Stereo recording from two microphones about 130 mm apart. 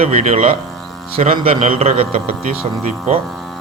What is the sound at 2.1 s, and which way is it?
Speech, 90° right.